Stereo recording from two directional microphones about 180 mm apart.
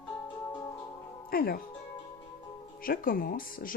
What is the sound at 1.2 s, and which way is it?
Speech, 55° left (ahead or behind).